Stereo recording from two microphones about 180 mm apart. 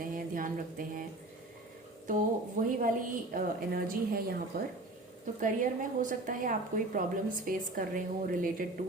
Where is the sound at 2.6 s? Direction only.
45° right (ahead or behind).